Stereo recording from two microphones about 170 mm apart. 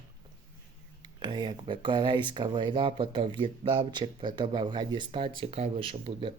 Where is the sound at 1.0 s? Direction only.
25° right (ahead or behind).